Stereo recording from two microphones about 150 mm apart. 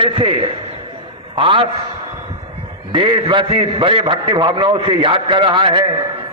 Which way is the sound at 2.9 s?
35° right (ahead or behind).